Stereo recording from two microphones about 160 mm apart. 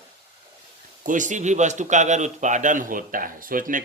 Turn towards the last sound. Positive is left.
turn(degrees=-60)  # may be behind; listen again after turning